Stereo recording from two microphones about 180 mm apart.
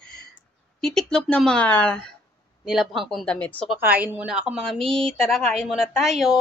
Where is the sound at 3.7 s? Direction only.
10° right (ahead or behind).